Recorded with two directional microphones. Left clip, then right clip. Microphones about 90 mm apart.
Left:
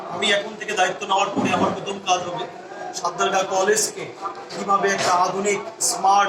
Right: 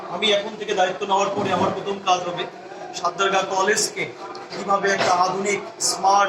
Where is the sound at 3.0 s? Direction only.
25° right (ahead or behind).